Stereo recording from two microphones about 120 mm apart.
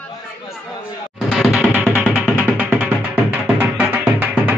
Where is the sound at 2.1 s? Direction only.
15° right (ahead or behind).